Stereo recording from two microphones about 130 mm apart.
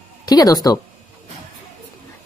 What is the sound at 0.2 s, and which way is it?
Speech, 30° left (ahead or behind).